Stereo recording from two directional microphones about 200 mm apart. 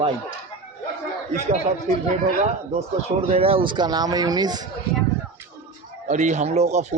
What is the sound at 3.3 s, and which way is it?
Speech, 30° right (ahead or behind).